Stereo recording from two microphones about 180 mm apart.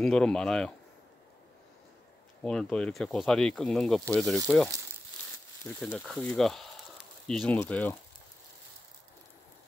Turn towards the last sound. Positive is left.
turn(degrees=10)  # may be behind; listen again after turning